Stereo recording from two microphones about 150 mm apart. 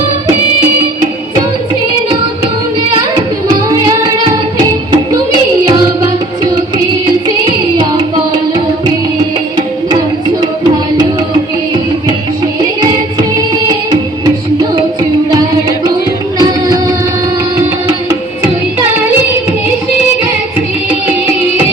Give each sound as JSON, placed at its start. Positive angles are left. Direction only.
{"t": 5.7, "sound": "music", "side_deg": -25}
{"t": 16.4, "sound": "music", "side_deg": -25}